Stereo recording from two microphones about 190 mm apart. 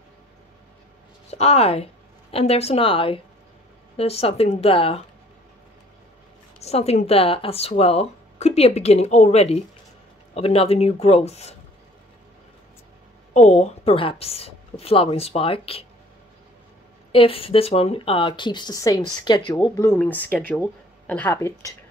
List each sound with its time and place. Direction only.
1.3 s speech: 35° left (ahead or behind)
6.6 s speech: 35° left (ahead or behind)
13.3 s speech: 35° left (ahead or behind)
17.1 s speech: 30° left (ahead or behind)